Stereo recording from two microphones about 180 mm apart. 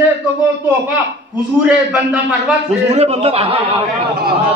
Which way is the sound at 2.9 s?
35° right (ahead or behind).